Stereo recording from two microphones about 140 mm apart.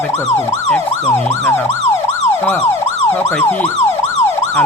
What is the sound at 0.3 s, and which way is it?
Emergency vehicle, 20° left (ahead or behind).